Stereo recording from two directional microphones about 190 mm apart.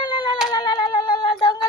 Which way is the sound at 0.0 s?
25° left (ahead or behind).